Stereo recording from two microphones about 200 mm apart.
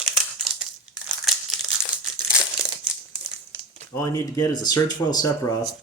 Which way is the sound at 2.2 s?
5° right (ahead or behind).